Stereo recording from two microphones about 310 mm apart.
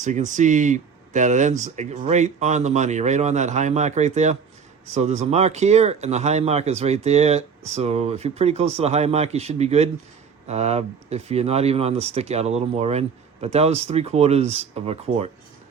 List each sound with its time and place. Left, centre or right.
0.0 s speech: right